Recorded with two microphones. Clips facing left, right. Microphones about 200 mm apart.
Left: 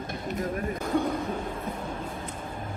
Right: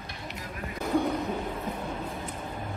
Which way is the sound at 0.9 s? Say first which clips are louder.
Right 1 dB; 5° right (ahead or behind).